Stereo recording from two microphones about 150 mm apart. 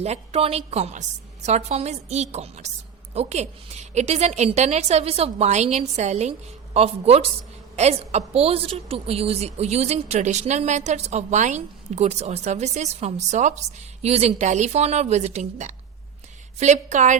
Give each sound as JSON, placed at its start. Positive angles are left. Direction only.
{"t": 0.0, "sound": "a woman's voice", "side_deg": -45}